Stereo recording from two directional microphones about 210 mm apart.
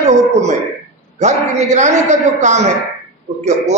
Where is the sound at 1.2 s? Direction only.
35° right (ahead or behind).